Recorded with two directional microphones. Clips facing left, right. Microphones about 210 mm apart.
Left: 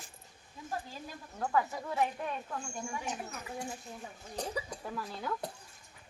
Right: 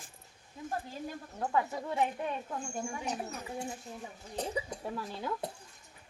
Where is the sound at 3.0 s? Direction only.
35° right (ahead or behind).